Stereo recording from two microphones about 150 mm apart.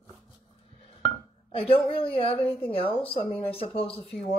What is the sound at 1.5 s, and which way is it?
A woman's voice, 40° left (ahead or behind).